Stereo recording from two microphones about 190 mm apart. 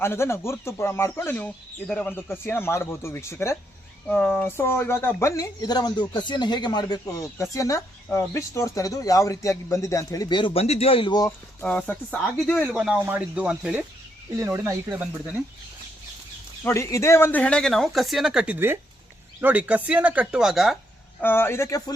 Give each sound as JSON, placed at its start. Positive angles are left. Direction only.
{"t": 0.0, "sound": "speech", "side_deg": 15}
{"t": 11.6, "sound": "speech", "side_deg": 5}
{"t": 16.6, "sound": "speech", "side_deg": 15}
{"t": 21.2, "sound": "speech", "side_deg": 10}